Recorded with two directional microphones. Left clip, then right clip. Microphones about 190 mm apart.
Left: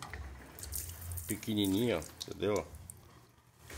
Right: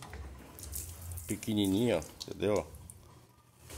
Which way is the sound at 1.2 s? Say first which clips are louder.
Right 2 dB; 20° right (ahead or behind).